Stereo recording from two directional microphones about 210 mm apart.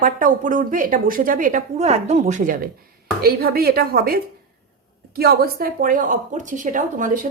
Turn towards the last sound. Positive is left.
turn(degrees=-40)  # may be behind; listen again after turning